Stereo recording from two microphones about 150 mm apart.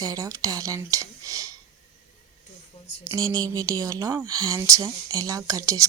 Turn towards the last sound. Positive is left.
turn(degrees=-20)  # may be behind; listen again after turning